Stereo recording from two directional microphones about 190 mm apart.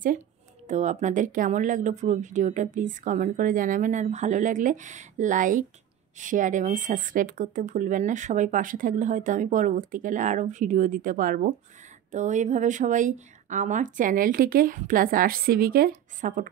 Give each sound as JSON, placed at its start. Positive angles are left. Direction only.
{"t": 0.7, "sound": "speech", "side_deg": -40}